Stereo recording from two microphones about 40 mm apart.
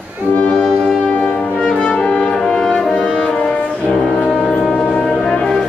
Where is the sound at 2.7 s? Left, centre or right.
Left.